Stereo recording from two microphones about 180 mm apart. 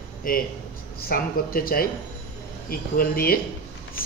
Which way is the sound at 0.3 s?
55° left (ahead or behind).